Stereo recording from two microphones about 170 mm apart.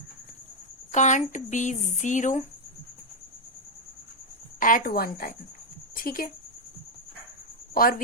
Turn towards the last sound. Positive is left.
turn(degrees=60)  # may be behind; listen again after turning